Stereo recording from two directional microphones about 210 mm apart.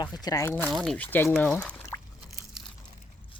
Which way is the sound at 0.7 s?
Centre (ahead or behind).